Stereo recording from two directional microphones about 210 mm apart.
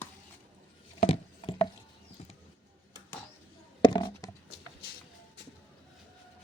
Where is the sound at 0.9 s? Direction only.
30° left (ahead or behind).